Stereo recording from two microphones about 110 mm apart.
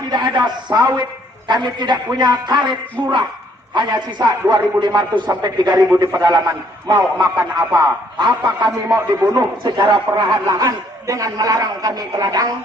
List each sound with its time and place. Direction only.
0.1 s a man's voice: 40° right (ahead or behind)
10.6 s a man's voice: 30° right (ahead or behind)